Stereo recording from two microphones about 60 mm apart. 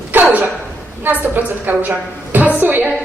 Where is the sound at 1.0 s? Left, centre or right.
Right.